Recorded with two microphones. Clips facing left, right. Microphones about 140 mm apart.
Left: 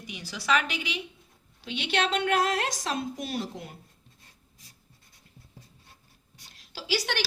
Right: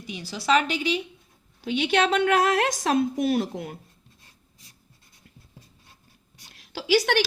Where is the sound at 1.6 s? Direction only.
50° right (ahead or behind).